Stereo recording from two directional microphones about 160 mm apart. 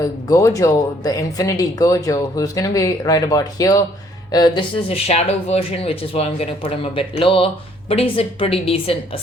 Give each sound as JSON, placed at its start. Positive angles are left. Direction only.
{"t": 0.0, "sound": "speech", "side_deg": 20}
{"t": 4.9, "sound": "speech", "side_deg": 40}